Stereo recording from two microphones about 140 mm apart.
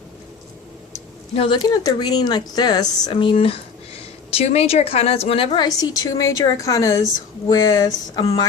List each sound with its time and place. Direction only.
1.4 s speech: 35° left (ahead or behind)
5.6 s a woman's voice: 25° left (ahead or behind)